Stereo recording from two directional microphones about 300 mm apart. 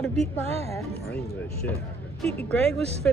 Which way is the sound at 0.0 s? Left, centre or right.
Centre.